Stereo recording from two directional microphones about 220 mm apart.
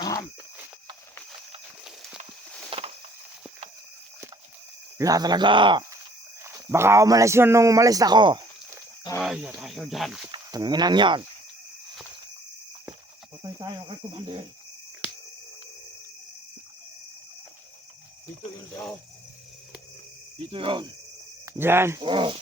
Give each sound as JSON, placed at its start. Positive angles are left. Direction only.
{"t": 0.0, "sound": "a sound", "side_deg": 15}
{"t": 2.6, "sound": "a sound", "side_deg": -25}
{"t": 4.9, "sound": "cricket", "side_deg": -15}
{"t": 6.4, "sound": "a man's voice", "side_deg": -10}
{"t": 9.2, "sound": "speech", "side_deg": -5}
{"t": 10.3, "sound": "cricket", "side_deg": -20}
{"t": 13.4, "sound": "cricket", "side_deg": -20}
{"t": 20.4, "sound": "cricket", "side_deg": -25}
{"t": 21.4, "sound": "speech", "side_deg": -10}